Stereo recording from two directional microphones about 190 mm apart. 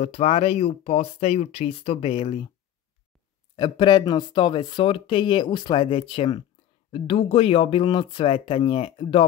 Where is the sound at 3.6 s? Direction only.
25° left (ahead or behind).